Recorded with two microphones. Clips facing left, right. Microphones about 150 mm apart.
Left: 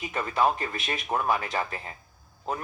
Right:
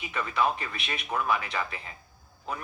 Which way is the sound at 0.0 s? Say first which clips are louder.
Left 3 dB; 40° left (ahead or behind).